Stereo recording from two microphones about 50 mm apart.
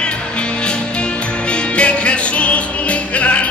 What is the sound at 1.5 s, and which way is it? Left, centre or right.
Music, left.